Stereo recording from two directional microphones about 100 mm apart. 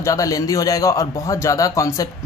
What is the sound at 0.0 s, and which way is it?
A man's voice, 35° left (ahead or behind).